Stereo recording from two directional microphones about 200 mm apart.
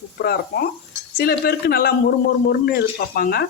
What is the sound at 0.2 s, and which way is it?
Speech, 50° left (ahead or behind).